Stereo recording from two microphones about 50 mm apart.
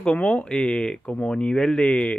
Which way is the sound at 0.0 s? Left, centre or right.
Centre.